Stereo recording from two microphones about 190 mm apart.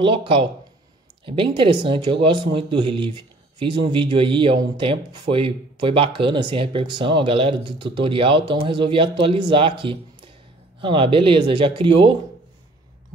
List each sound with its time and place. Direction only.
0.0 s speech: 25° right (ahead or behind)